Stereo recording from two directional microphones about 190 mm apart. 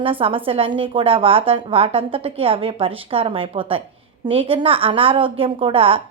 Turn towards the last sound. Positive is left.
turn(degrees=-30)  # may be behind; listen again after turning